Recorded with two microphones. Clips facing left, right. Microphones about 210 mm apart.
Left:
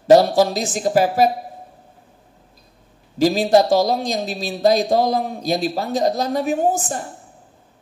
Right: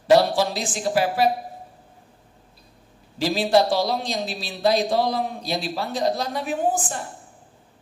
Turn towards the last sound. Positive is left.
turn(degrees=40)  # may be behind; listen again after turning